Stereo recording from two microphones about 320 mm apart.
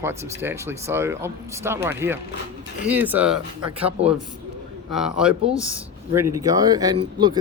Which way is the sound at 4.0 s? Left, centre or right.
Centre.